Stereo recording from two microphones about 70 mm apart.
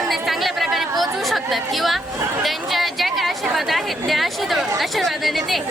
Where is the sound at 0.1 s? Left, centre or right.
Centre.